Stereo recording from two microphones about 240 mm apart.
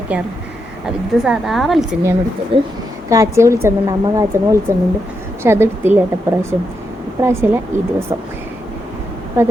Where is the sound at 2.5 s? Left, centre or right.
Right.